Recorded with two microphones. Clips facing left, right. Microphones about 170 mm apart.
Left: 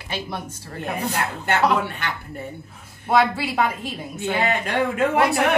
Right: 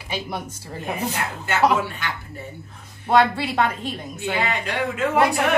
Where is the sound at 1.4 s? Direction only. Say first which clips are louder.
Right 1 dB; 65° left (ahead or behind).